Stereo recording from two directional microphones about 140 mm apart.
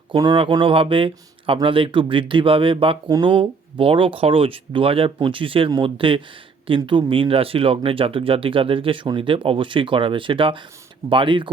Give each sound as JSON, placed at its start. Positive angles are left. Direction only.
{"t": 0.2, "sound": "speech", "side_deg": -35}